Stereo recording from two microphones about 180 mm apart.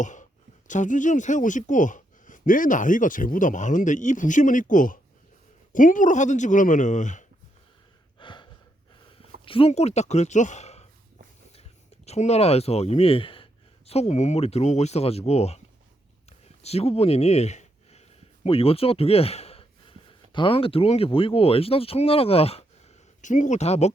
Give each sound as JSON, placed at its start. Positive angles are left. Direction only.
{"t": 0.0, "sound": "a sound", "side_deg": 45}
{"t": 0.7, "sound": "speech", "side_deg": 45}
{"t": 8.2, "sound": "gasp", "side_deg": 25}
{"t": 9.4, "sound": "speech", "side_deg": 30}
{"t": 12.0, "sound": "speech", "side_deg": 35}
{"t": 16.6, "sound": "speech", "side_deg": 35}
{"t": 23.2, "sound": "speech", "side_deg": 45}